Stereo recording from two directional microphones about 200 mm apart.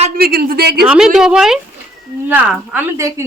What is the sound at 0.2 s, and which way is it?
Speech, 50° right (ahead or behind).